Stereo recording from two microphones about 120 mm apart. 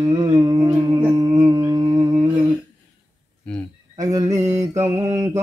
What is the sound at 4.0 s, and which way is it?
Mantra, 30° right (ahead or behind).